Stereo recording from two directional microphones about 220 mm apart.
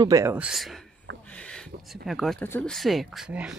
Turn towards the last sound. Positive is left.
turn(degrees=-5)  # may be behind; listen again after turning